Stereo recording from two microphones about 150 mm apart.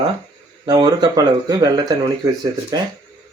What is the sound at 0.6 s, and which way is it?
Speech, 25° right (ahead or behind).